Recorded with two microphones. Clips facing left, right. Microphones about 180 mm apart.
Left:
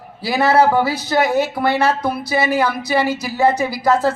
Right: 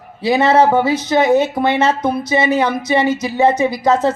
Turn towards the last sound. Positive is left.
turn(degrees=-20)  # may be behind; listen again after turning